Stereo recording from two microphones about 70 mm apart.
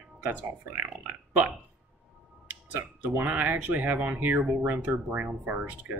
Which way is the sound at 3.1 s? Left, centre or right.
Right.